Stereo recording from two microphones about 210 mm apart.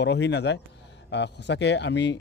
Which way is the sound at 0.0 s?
55° left (ahead or behind).